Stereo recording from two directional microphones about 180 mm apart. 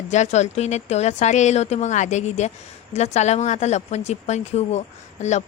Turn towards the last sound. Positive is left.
turn(degrees=40)  # may be behind; listen again after turning